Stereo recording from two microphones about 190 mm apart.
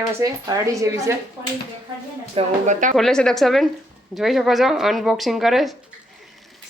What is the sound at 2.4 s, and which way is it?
Speech, 40° right (ahead or behind).